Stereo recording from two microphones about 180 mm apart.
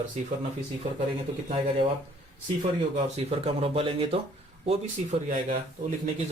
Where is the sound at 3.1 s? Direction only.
30° right (ahead or behind).